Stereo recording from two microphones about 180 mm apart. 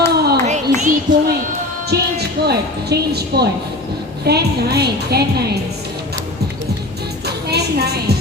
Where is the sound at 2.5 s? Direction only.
65° right (ahead or behind).